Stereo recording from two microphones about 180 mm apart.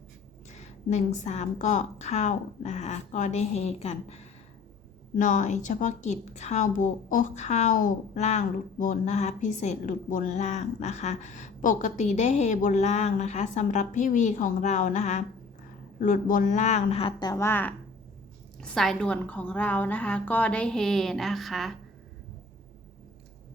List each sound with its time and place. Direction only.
0.5 s a woman's voice: 40° left (ahead or behind); by 21.8 s centre (ahead or behind)